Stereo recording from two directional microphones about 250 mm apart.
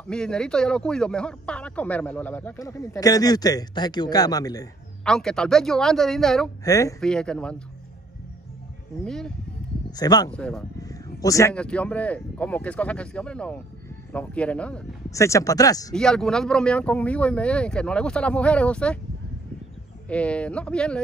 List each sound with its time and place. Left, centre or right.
0.1 s speech: centre
5.0 s a man's voice: centre
6.6 s speech: centre
7.0 s a man's voice: centre
9.0 s a man's voice: centre
9.8 s speech: centre
10.3 s a man's voice: centre
15.9 s a man's voice: centre
20.1 s a man's voice: centre